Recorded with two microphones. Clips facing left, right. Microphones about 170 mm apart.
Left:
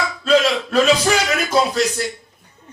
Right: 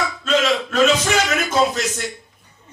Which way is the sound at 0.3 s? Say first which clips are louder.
Left 3 dB; 35° left (ahead or behind).